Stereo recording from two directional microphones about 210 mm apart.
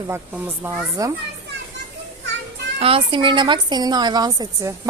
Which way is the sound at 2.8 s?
25° right (ahead or behind).